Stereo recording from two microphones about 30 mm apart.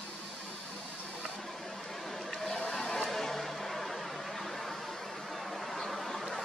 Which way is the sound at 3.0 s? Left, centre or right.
Centre.